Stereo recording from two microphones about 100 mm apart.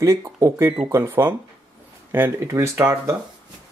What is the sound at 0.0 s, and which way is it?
Speech, 30° right (ahead or behind).